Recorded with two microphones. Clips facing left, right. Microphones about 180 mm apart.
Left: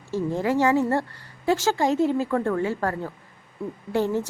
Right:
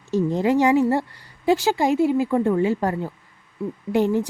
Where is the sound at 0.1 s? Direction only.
20° right (ahead or behind).